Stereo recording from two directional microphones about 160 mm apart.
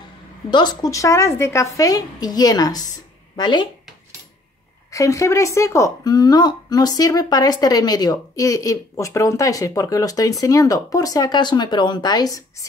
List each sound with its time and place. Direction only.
0.5 s speech: 30° left (ahead or behind)
4.9 s speech: 20° left (ahead or behind)